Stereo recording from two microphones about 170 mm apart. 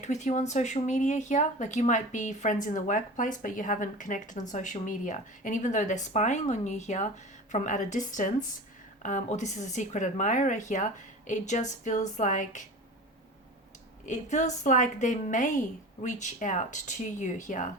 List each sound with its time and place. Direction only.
0.0 s speech: 45° left (ahead or behind)
14.0 s speech: 45° left (ahead or behind)